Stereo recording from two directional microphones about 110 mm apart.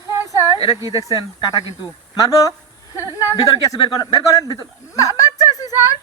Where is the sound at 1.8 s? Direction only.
30° left (ahead or behind).